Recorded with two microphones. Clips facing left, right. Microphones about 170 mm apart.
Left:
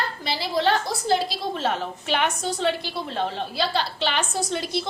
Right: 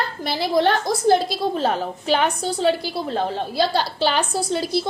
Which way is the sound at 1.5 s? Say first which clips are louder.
Right 4 dB; 35° right (ahead or behind).